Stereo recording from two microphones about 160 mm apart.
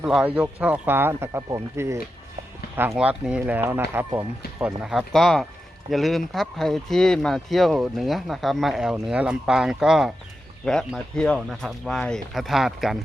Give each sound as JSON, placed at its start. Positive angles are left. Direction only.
{"t": 0.0, "sound": "speech", "side_deg": -5}
{"t": 2.9, "sound": "speech", "side_deg": -5}
{"t": 4.6, "sound": "speech", "side_deg": -5}